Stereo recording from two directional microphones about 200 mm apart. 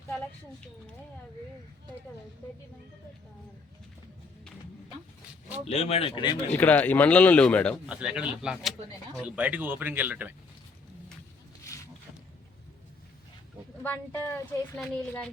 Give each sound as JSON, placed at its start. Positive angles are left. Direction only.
{"t": 5.6, "sound": "speech", "side_deg": 30}
{"t": 6.5, "sound": "speech", "side_deg": 10}
{"t": 7.9, "sound": "speech", "side_deg": -5}
{"t": 13.8, "sound": "speech", "side_deg": 10}